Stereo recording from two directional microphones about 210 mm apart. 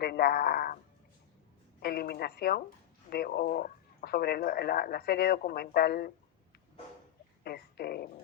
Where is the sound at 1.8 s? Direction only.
45° left (ahead or behind).